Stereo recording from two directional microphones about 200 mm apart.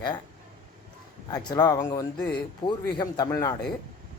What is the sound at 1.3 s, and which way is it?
Speech, 20° left (ahead or behind).